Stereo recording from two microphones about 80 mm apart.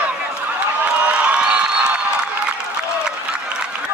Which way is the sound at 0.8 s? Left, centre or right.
Centre.